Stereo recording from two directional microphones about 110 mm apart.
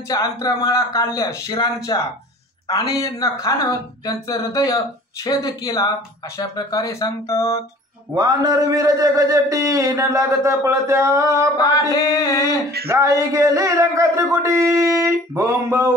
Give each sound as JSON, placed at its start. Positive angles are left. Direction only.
{"t": 0.1, "sound": "speech", "side_deg": 35}
{"t": 8.1, "sound": "a man's voice", "side_deg": -35}
{"t": 11.9, "sound": "speech", "side_deg": 30}
{"t": 12.8, "sound": "a man's voice", "side_deg": -25}